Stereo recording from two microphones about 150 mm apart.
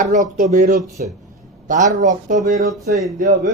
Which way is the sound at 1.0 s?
70° right (ahead or behind).